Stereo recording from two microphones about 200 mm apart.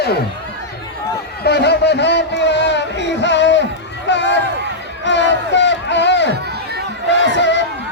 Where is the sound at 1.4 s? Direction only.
55° left (ahead or behind).